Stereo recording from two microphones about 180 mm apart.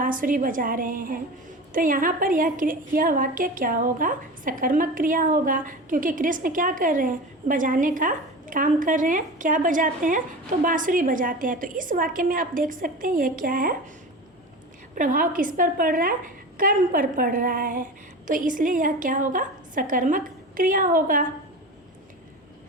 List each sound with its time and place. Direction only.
0.0 s a woman's voice: 50° right (ahead or behind)
14.9 s a woman's voice: 50° right (ahead or behind)